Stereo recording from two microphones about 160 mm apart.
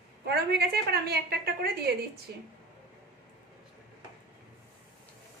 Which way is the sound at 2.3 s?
90° right.